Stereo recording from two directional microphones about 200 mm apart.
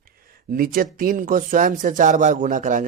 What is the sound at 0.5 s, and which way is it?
A man's voice, 45° right (ahead or behind).